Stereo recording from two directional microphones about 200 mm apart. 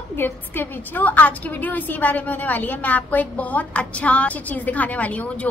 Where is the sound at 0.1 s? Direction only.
10° left (ahead or behind).